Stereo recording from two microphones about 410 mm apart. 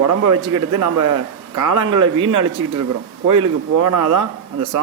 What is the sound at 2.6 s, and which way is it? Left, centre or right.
Speech, right.